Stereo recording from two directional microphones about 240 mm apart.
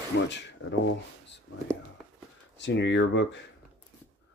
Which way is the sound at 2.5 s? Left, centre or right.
Left.